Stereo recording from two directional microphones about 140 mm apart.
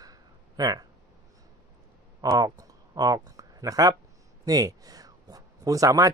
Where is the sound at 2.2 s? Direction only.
25° right (ahead or behind).